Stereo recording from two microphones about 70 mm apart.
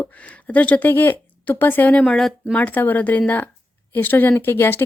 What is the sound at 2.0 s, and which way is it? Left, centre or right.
Speech, centre.